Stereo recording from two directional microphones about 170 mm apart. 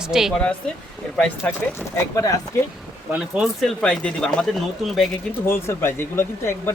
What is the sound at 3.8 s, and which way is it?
Speech, 5° left (ahead or behind).